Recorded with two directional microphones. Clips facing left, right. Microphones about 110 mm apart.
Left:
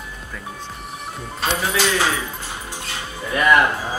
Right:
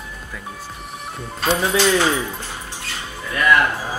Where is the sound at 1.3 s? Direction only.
Centre (ahead or behind).